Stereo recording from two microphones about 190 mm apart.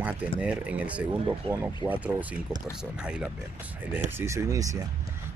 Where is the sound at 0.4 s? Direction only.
5° right (ahead or behind).